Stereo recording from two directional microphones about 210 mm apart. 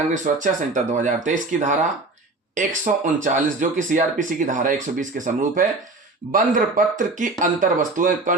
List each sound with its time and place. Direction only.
0.1 s speech: 40° right (ahead or behind)